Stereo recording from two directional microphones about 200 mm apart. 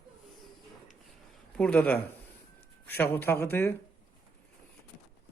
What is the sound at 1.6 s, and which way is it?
Speech, 5° left (ahead or behind).